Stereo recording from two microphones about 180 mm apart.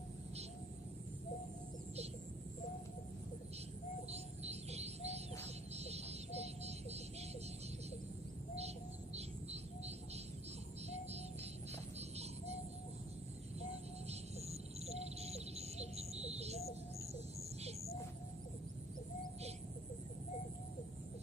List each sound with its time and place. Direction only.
4.1 s music: 35° right (ahead or behind)
8.5 s a sound: 35° right (ahead or behind)
14.0 s music: 35° right (ahead or behind)